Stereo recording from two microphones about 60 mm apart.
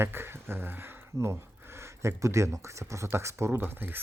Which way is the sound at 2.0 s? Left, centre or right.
Right.